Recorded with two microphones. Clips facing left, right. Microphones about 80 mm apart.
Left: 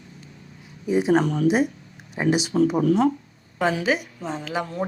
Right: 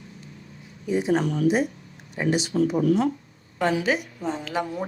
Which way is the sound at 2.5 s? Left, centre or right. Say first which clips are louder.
Left 1 dB; left.